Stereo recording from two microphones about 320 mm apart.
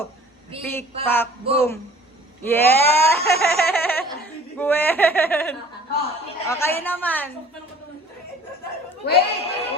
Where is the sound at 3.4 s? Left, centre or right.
Centre.